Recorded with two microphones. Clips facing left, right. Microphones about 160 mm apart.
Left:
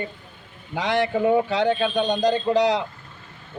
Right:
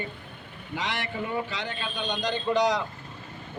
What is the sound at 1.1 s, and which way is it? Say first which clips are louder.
Speech: left 11 dB; 85° left.